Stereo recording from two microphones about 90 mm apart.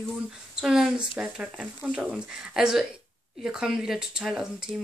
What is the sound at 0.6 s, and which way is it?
A woman's voice, 5° right (ahead or behind).